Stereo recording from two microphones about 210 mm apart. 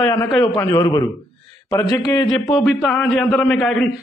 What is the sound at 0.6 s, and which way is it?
A man's voice, 15° left (ahead or behind).